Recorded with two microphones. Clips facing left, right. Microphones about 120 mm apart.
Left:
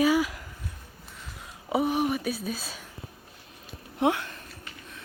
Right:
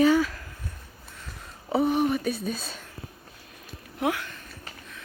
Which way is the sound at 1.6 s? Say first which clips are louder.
Right 2 dB; 10° left (ahead or behind).